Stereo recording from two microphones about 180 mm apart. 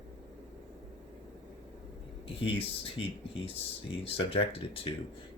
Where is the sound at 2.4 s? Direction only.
30° left (ahead or behind).